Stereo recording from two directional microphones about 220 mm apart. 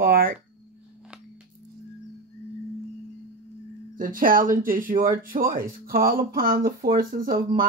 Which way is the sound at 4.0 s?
40° right (ahead or behind).